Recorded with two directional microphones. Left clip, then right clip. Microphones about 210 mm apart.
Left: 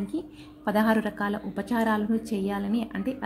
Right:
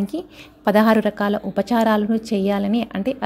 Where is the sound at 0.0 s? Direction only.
30° right (ahead or behind).